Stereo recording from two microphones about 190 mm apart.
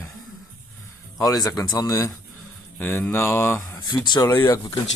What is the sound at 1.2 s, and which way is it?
Speech, 20° left (ahead or behind).